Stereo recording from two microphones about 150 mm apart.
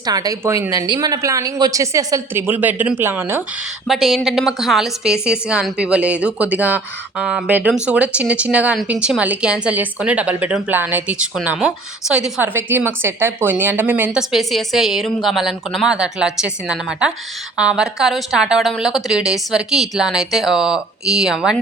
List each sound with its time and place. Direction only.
0.0 s a woman's voice: 25° right (ahead or behind)
3.8 s a woman's voice: centre (ahead or behind)